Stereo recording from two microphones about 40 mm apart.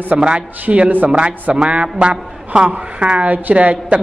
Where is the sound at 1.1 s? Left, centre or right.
Right.